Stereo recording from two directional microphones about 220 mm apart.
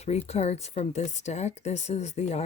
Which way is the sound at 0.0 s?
30° left (ahead or behind).